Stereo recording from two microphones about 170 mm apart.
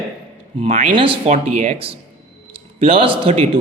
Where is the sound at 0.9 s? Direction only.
30° right (ahead or behind).